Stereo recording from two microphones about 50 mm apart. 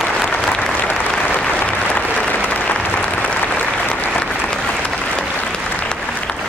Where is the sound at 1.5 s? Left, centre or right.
Left.